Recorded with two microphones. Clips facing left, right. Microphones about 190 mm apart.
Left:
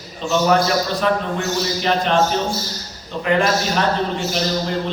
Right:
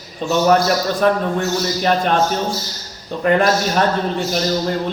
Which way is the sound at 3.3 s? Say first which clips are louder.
Right 3 dB; 45° right (ahead or behind).